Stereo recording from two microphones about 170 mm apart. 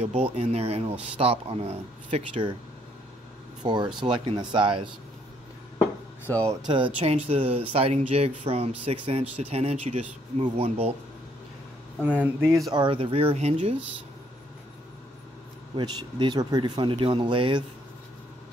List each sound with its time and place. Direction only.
0.0 s speech: 35° right (ahead or behind)
3.6 s speech: 25° right (ahead or behind)
6.3 s speech: 20° right (ahead or behind)
6.7 s speech: 30° right (ahead or behind)
12.2 s speech: 15° right (ahead or behind)
12.7 s speech: 30° right (ahead or behind)
15.7 s speech: 25° right (ahead or behind)